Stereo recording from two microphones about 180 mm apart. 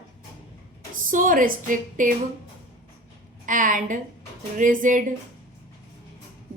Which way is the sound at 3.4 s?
45° right (ahead or behind).